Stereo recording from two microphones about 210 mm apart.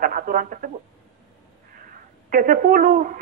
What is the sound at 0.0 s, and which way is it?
Speech, 40° right (ahead or behind).